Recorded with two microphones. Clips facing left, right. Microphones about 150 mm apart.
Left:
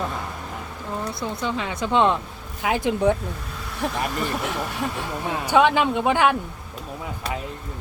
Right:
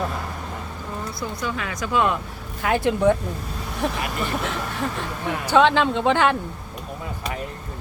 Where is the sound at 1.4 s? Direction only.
25° left (ahead or behind).